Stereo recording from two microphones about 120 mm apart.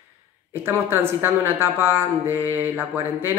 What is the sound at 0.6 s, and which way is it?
A woman's voice, 20° right (ahead or behind).